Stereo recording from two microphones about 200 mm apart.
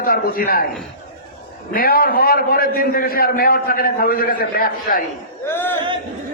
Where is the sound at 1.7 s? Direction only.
50° left (ahead or behind).